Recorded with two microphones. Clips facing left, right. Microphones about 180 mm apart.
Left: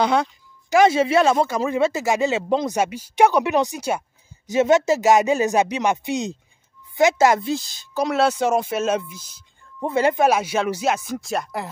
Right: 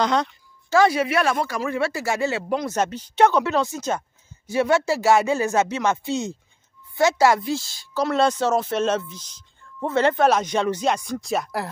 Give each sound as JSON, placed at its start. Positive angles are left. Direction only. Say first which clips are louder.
{"t": 0.0, "sound": "speech", "louder": "left 2 dB", "side_deg": 10}
{"t": 0.7, "sound": "speech", "louder": "left 2 dB", "side_deg": 20}